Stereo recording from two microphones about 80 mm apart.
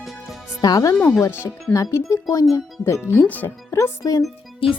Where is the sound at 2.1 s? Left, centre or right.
Left.